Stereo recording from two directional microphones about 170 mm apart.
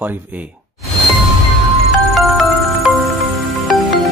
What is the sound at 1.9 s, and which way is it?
Music, centre (ahead or behind).